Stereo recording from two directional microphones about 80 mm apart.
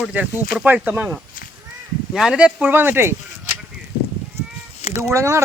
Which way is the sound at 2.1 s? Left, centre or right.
Centre.